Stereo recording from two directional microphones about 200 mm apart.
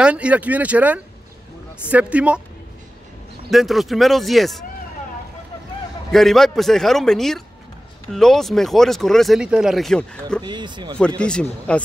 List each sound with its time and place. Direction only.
0.0 s speech: 5° right (ahead or behind)
3.4 s speech: centre (ahead or behind)
6.1 s speech: centre (ahead or behind)
10.4 s speech: 20° right (ahead or behind)
11.0 s speech: 5° left (ahead or behind)